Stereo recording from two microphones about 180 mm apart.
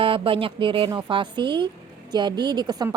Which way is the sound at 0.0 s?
30° right (ahead or behind).